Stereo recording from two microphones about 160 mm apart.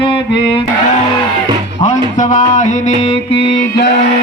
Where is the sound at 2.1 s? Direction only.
55° left (ahead or behind).